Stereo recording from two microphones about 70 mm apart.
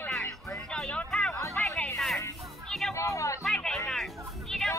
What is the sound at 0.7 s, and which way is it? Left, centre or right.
Music, centre.